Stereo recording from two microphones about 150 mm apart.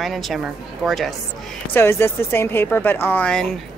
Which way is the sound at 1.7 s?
15° left (ahead or behind).